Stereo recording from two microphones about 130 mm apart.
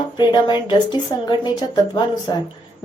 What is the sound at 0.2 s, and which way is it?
A woman's voice, 35° left (ahead or behind).